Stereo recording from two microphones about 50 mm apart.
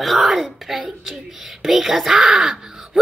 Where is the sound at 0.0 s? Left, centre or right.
Centre.